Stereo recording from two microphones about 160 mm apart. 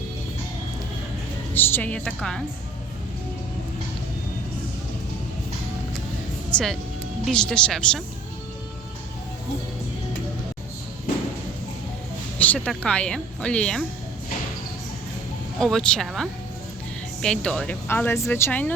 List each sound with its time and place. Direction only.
1.5 s speech: 15° left (ahead or behind)
6.5 s speech: 5° left (ahead or behind)
12.4 s speech: 10° left (ahead or behind)
15.5 s speech: 5° left (ahead or behind)